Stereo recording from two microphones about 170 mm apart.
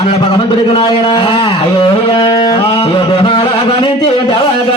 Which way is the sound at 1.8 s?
30° left (ahead or behind).